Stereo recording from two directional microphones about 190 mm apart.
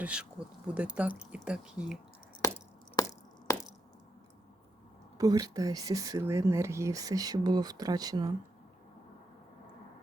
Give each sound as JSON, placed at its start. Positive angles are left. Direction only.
{"t": 0.0, "sound": "speech", "side_deg": -5}
{"t": 3.0, "sound": "a sound", "side_deg": 20}
{"t": 5.1, "sound": "speech", "side_deg": -20}